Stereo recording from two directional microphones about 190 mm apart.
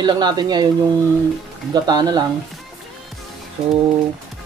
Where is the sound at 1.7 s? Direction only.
20° right (ahead or behind).